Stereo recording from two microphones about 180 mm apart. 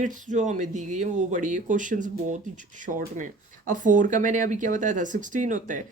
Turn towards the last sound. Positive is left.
turn(degrees=-45)  # may be behind; listen again after turning